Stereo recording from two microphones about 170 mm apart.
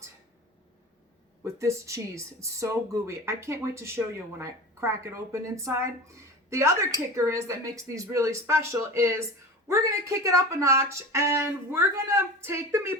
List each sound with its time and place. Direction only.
1.5 s speech: 15° right (ahead or behind)